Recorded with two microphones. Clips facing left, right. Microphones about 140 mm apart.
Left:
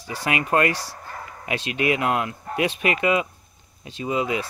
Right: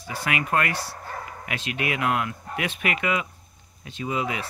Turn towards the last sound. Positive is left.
turn(degrees=25)  # may be behind; listen again after turning